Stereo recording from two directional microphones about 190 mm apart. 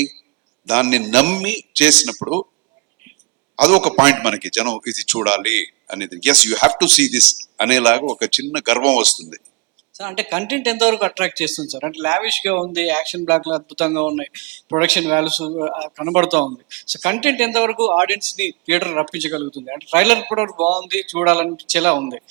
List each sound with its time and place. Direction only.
0.6 s a man's voice: 5° right (ahead or behind)
3.5 s a man's voice: 5° right (ahead or behind)